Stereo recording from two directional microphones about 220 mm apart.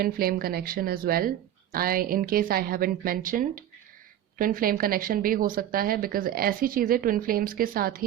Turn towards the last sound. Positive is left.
turn(degrees=-40)  # may be behind; listen again after turning